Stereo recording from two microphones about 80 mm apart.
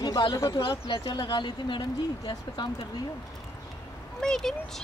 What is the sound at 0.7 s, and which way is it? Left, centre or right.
Speech, left.